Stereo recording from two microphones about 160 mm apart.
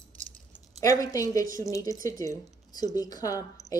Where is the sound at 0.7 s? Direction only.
20° left (ahead or behind).